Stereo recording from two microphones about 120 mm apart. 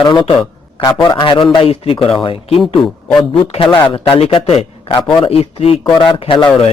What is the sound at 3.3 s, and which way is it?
A man's voice, 50° left (ahead or behind).